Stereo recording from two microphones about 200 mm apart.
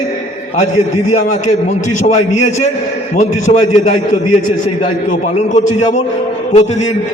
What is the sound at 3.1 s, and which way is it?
Speech, 35° left (ahead or behind).